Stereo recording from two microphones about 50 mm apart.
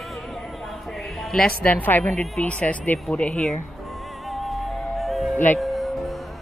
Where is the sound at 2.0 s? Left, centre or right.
Left.